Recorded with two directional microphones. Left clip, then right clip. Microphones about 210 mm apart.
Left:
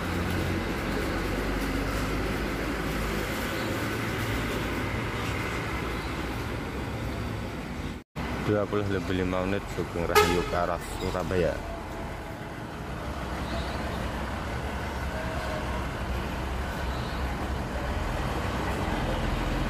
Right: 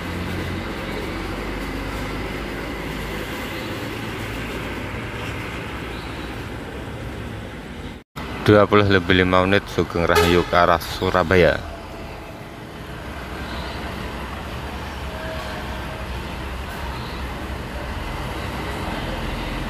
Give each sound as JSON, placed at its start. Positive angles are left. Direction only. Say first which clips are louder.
{"t": 8.5, "sound": "speech", "louder": "right 16 dB", "side_deg": -20}